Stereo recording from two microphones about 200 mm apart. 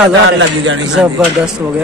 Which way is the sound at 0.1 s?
65° right (ahead or behind).